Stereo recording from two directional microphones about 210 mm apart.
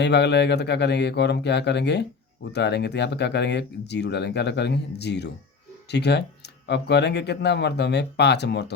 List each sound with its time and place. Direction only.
0.0 s speech: 55° left (ahead or behind)